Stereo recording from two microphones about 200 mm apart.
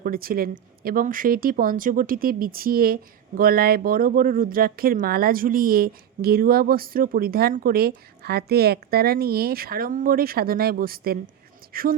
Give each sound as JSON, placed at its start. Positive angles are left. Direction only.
{"t": 0.0, "sound": "speech", "side_deg": -45}